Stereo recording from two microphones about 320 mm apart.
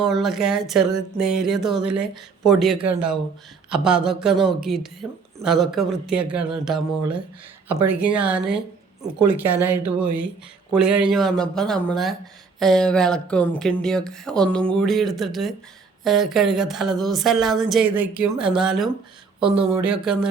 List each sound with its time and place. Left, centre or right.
0.1 s speech: centre
19.4 s speech: centre
19.8 s speech: centre